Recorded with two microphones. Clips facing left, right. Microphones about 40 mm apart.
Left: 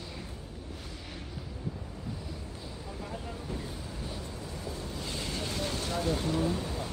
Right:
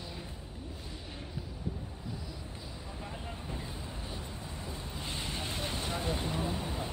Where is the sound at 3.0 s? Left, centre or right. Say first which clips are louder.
Left 3 dB; right.